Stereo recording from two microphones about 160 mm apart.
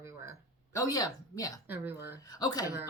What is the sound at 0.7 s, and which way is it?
Speech, 20° left (ahead or behind).